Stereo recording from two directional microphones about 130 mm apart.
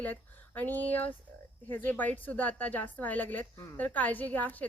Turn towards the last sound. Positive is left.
turn(degrees=15)  # may be behind; listen again after turning